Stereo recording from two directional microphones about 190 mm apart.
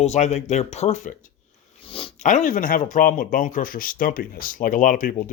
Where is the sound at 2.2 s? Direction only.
40° left (ahead or behind).